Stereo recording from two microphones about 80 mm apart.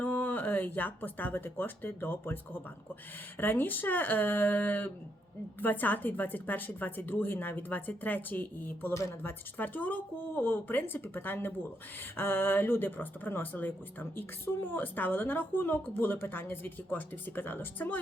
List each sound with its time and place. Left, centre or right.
0.0 s speech: left
8.9 s a woman's voice: left
9.6 s speech: left